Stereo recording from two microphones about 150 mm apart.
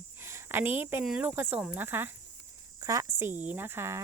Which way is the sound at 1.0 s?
5° right (ahead or behind).